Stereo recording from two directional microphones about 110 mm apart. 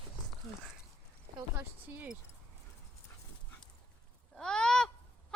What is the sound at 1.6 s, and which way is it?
Speech, 15° right (ahead or behind).